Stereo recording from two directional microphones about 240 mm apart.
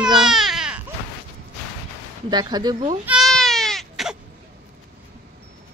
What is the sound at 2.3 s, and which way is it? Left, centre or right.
Speech, centre.